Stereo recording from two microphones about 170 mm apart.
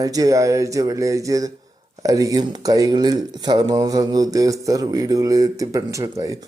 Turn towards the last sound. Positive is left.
turn(degrees=-20)  # may be behind; listen again after turning